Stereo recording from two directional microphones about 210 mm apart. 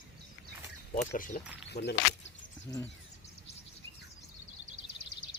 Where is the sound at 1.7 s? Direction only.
55° left (ahead or behind).